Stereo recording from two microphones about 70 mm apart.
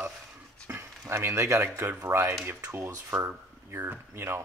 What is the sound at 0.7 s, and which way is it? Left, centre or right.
Speech, right.